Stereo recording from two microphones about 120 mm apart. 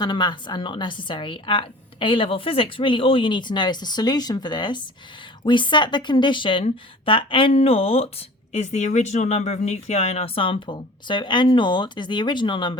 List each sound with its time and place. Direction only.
0.0 s a woman's voice: 40° left (ahead or behind)